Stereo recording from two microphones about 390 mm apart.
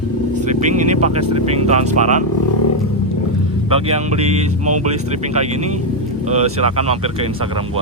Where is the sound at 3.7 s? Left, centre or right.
Centre.